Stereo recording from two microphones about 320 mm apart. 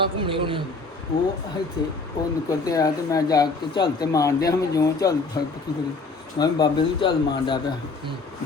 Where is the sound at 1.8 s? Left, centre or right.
Centre.